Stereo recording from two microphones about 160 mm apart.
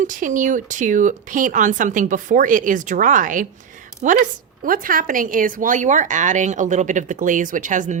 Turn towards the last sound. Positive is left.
turn(degrees=-50)  # may be behind; listen again after turning